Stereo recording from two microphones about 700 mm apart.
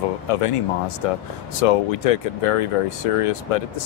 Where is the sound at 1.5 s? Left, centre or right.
Left.